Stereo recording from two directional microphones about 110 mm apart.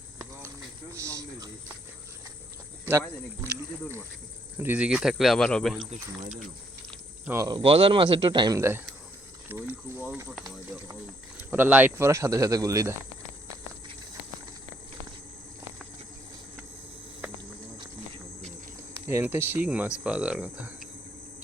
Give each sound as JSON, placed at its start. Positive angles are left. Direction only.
{"t": 0.9, "sound": "a sound", "side_deg": -30}
{"t": 4.5, "sound": "speech", "side_deg": -15}
{"t": 5.7, "sound": "speech", "side_deg": 0}
{"t": 7.3, "sound": "speech", "side_deg": -35}
{"t": 7.6, "sound": "speech", "side_deg": -60}
{"t": 8.5, "sound": "speech", "side_deg": -25}
{"t": 11.5, "sound": "speech", "side_deg": -15}
{"t": 19.0, "sound": "speech", "side_deg": -20}